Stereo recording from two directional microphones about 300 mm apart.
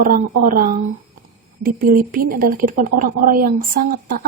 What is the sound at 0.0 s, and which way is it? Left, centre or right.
A woman's voice, right.